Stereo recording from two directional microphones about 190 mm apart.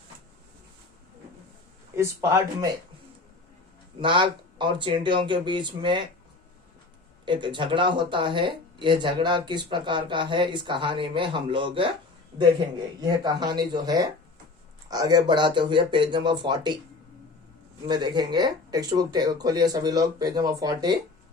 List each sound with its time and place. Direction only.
2.0 s speech: 15° right (ahead or behind)
4.0 s speech: 25° right (ahead or behind)
7.3 s speech: 25° right (ahead or behind)
17.8 s speech: 20° right (ahead or behind)